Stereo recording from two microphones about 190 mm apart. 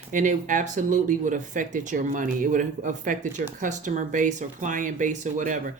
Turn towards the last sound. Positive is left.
turn(degrees=-40)  # may be behind; listen again after turning